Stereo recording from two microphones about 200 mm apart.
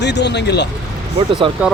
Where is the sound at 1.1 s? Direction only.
25° right (ahead or behind).